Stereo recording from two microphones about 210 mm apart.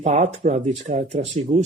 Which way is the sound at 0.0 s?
30° right (ahead or behind).